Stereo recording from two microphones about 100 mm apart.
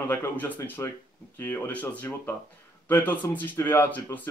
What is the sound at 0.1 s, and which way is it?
Speech, 15° left (ahead or behind).